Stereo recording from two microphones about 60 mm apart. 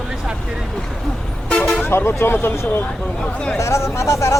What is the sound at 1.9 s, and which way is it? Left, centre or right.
Speech, left.